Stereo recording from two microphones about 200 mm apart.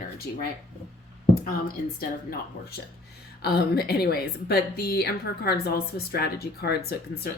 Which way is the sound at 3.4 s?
50° left (ahead or behind).